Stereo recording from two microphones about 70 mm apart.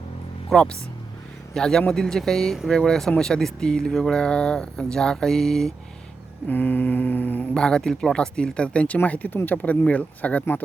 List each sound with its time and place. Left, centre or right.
0.5 s speech: centre
6.5 s speech: left
7.5 s speech: centre